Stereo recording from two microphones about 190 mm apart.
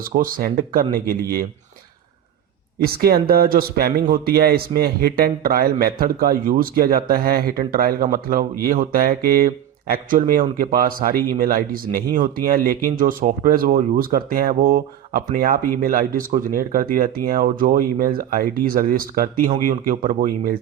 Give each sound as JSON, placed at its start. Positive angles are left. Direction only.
{"t": 0.0, "sound": "speech", "side_deg": -50}
{"t": 2.8, "sound": "speech", "side_deg": -55}